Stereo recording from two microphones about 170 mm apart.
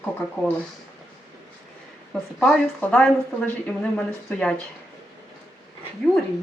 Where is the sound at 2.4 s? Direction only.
5° left (ahead or behind).